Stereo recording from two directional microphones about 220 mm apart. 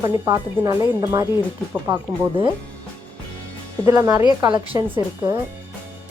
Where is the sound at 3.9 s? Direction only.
15° right (ahead or behind).